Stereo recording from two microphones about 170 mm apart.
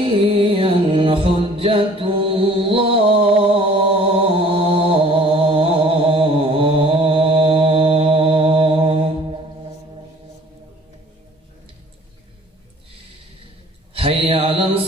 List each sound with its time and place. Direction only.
0.0 s music: 35° right (ahead or behind)
4.5 s mantra: 35° right (ahead or behind)
13.9 s mantra: 35° right (ahead or behind)